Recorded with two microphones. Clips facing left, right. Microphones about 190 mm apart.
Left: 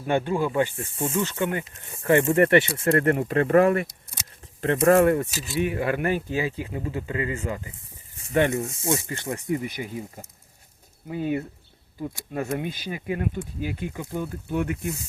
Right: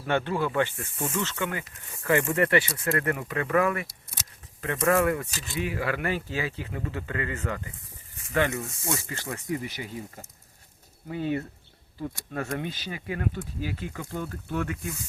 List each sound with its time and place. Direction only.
0.0 s speech: 15° left (ahead or behind)
0.8 s speech: 25° left (ahead or behind)
11.1 s speech: 15° left (ahead or behind)
12.5 s speech: 15° left (ahead or behind)